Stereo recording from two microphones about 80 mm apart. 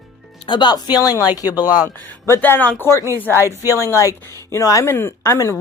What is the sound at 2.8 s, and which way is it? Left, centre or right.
Speech, left.